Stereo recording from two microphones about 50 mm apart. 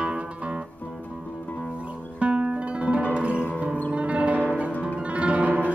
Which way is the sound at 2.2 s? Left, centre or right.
Right.